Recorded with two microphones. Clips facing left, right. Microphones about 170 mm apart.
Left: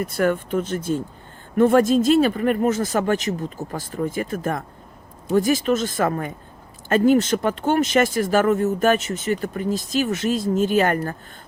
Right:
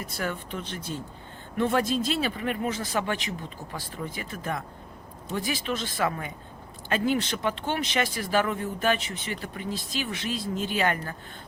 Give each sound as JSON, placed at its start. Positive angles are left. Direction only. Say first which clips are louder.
{"t": 0.0, "sound": "speech", "louder": "left 11 dB", "side_deg": 55}